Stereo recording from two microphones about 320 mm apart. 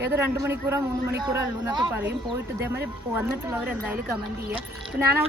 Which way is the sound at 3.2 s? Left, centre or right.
Centre.